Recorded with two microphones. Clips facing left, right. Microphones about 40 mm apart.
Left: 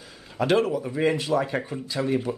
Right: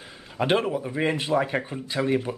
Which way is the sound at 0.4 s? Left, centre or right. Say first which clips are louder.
Left 1 dB; right.